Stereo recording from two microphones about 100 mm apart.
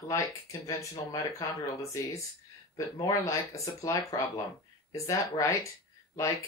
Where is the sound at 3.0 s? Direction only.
30° left (ahead or behind).